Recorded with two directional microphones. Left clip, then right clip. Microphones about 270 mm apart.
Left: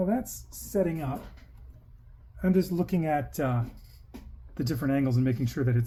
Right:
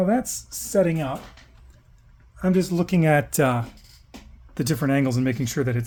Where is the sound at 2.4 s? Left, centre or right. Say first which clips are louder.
Right 4 dB; right.